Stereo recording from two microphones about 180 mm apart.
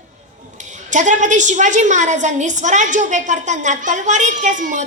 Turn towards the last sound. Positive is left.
turn(degrees=-45)  # may be behind; listen again after turning